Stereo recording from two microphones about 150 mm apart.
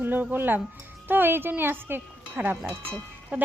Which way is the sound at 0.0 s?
10° right (ahead or behind).